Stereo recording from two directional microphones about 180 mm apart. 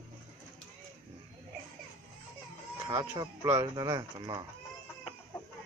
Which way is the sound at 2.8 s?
15° right (ahead or behind).